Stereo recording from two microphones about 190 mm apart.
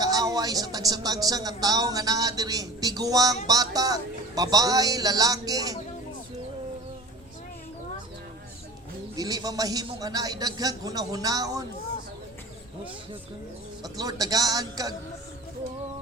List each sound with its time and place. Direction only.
0.0 s a man's voice: 20° right (ahead or behind)
9.1 s a man's voice: 20° right (ahead or behind)
13.8 s a man's voice: 20° right (ahead or behind)